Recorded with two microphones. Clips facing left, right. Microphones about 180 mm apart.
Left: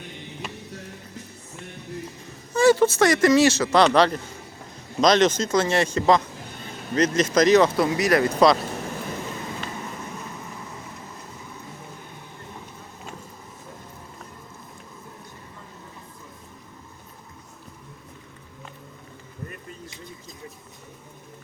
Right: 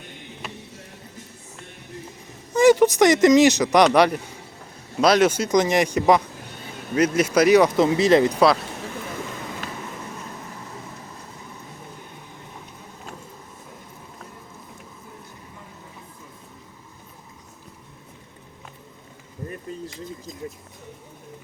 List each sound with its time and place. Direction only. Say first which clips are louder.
2.5 s speech: right 2 dB; 20° right (ahead or behind)
7.8 s speech: right 4 dB; 25° right (ahead or behind)